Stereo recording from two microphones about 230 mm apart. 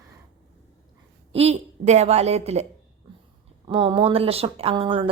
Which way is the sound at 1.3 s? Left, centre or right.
Right.